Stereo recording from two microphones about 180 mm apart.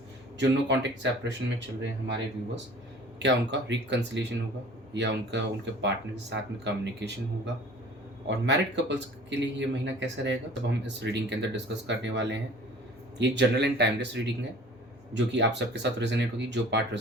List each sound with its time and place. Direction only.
0.3 s speech: 75° right (ahead or behind)
3.2 s speech: 75° right (ahead or behind)